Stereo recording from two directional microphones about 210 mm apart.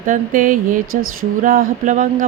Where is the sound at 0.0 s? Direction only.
40° right (ahead or behind).